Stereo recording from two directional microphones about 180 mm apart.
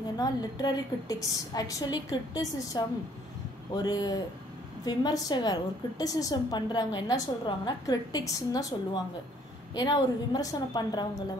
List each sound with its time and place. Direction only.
0.2 s a woman's voice: 20° left (ahead or behind)